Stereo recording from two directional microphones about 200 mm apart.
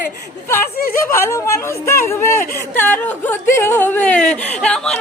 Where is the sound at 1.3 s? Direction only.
15° left (ahead or behind).